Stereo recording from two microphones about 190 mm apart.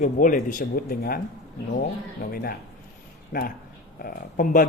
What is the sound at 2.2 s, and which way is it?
Speech, 50° left (ahead or behind).